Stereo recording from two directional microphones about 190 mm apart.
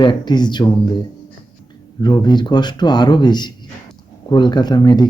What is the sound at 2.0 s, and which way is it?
Speech, 20° left (ahead or behind).